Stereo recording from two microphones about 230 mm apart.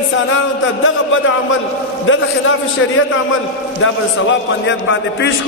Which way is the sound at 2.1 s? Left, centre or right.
Left.